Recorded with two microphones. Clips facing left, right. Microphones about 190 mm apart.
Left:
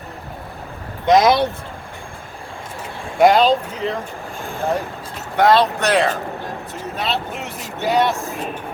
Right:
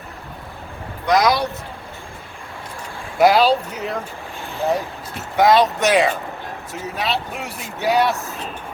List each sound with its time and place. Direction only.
1.0 s speech: 25° left (ahead or behind)
3.2 s speech: 5° right (ahead or behind)
5.4 s speech: 10° right (ahead or behind)
6.8 s speech: centre (ahead or behind)